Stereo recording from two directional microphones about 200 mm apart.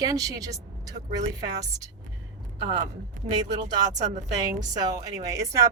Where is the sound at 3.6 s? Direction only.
40° right (ahead or behind).